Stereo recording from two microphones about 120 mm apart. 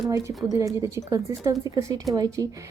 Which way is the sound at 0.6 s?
25° right (ahead or behind).